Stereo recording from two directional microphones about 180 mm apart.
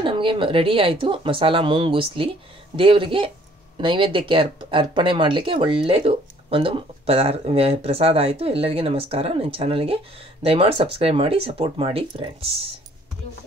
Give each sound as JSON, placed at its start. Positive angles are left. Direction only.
{"t": 0.0, "sound": "speech", "side_deg": -30}